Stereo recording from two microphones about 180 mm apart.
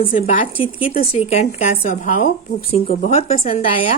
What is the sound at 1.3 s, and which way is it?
Speech, 35° left (ahead or behind).